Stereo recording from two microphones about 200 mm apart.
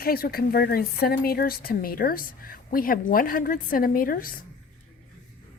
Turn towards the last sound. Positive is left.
turn(degrees=45)  # may be behind; listen again after turning